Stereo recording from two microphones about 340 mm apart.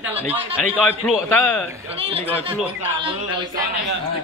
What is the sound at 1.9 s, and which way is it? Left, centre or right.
Speech, centre.